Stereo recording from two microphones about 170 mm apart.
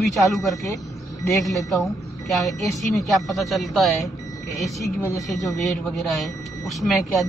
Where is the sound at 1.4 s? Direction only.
Centre (ahead or behind).